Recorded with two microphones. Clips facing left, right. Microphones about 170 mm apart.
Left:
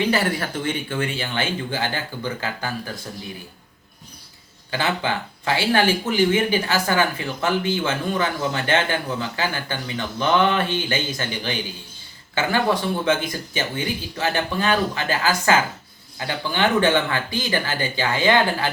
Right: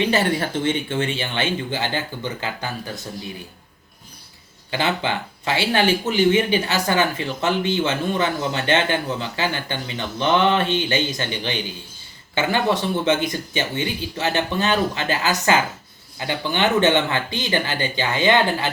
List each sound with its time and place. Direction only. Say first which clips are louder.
0.0 s a man's voice: right 2 dB; 25° right (ahead or behind)
4.7 s a man's voice: right 1 dB; 20° right (ahead or behind)